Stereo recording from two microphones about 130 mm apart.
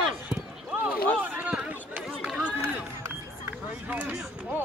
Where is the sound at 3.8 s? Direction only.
15° right (ahead or behind).